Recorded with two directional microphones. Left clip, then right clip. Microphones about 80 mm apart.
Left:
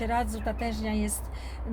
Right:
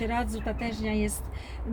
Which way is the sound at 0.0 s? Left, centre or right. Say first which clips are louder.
Left 1 dB; left.